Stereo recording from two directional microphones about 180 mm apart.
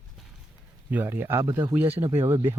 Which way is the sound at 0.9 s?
10° right (ahead or behind).